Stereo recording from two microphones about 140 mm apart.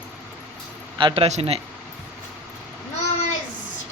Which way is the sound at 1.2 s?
50° right (ahead or behind).